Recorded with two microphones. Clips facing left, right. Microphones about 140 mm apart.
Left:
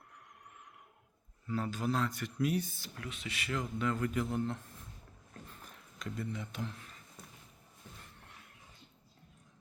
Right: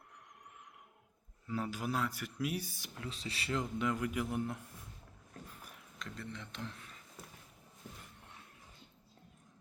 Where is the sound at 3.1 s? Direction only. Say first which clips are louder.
Right 1 dB; 30° right (ahead or behind); by 4.6 s 10° right (ahead or behind).